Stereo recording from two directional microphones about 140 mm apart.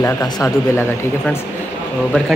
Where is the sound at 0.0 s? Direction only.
20° left (ahead or behind).